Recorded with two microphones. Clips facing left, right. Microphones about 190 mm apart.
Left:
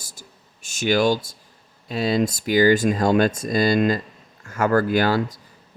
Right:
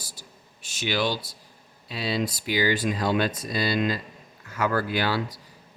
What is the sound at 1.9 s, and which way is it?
Speech, 45° left (ahead or behind).